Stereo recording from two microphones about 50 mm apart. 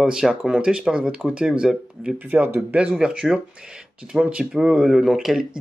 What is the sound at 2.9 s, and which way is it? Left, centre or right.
Speech, centre.